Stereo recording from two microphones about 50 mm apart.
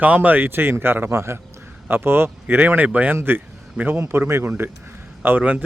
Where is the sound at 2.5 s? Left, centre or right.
Right.